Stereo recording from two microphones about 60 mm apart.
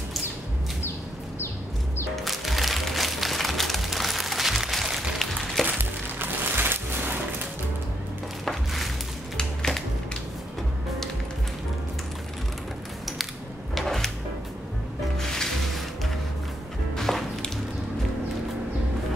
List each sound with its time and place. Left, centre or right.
2.1 s music: centre
5.7 s music: right
8.5 s a sound: centre
9.4 s music: centre
13.7 s music: centre
15.1 s music: centre
16.9 s a sound: centre